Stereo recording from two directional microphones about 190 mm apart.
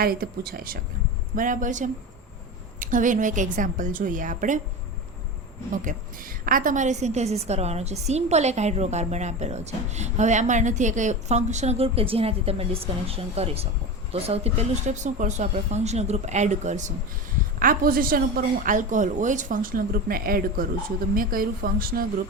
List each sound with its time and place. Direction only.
0.0 s a woman's voice: 50° right (ahead or behind)
5.7 s a woman's voice: 45° right (ahead or behind)